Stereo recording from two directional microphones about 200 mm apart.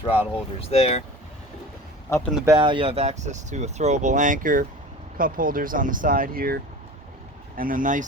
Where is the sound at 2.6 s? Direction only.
25° right (ahead or behind).